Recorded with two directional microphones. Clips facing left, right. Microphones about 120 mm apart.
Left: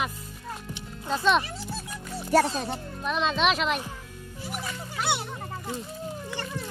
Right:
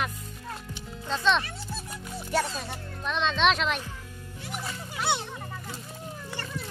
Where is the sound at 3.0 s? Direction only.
5° left (ahead or behind).